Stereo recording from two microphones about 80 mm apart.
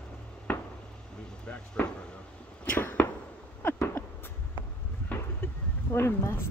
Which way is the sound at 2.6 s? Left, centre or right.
Centre.